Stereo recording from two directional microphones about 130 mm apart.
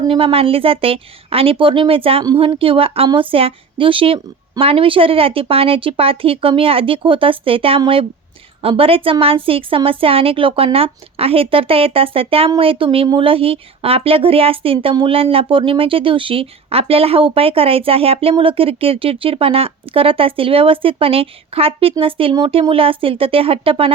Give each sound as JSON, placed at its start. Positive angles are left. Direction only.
{"t": 0.1, "sound": "a woman's voice", "side_deg": -45}